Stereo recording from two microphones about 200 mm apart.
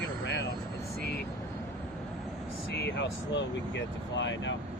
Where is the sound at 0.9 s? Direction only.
50° left (ahead or behind).